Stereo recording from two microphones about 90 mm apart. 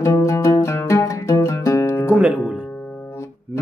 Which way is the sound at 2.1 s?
15° right (ahead or behind).